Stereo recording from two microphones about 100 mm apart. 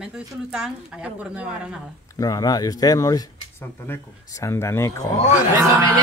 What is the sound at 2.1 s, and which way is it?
Speech, 40° left (ahead or behind).